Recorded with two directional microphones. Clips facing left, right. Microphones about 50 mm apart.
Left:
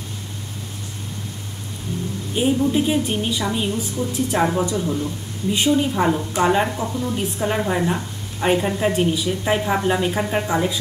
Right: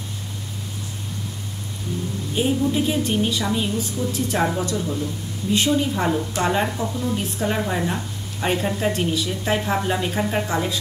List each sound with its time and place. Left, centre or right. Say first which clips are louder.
2.3 s a woman's voice: left 2 dB; centre
4.0 s a woman's voice: even; left
4.3 s a woman's voice: left 3 dB; centre